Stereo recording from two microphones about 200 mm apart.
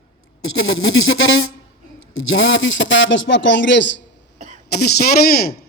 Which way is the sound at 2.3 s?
75° left (ahead or behind).